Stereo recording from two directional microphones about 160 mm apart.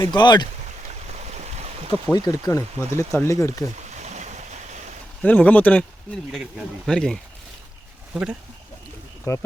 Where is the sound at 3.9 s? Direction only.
45° right (ahead or behind).